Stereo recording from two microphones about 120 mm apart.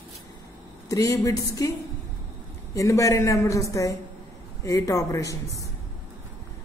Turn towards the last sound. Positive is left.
turn(degrees=25)  # may be behind; listen again after turning